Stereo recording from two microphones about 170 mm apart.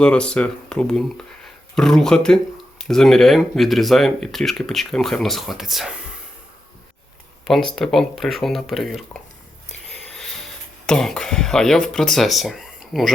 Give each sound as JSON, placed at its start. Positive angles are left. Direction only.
{"t": 0.0, "sound": "speech", "side_deg": 5}
{"t": 7.4, "sound": "speech", "side_deg": 0}
{"t": 10.1, "sound": "a sound", "side_deg": 0}
{"t": 10.8, "sound": "speech", "side_deg": 5}